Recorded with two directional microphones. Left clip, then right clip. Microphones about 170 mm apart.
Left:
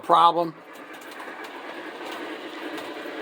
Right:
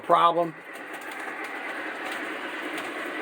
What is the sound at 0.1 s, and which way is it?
Speech, 10° left (ahead or behind).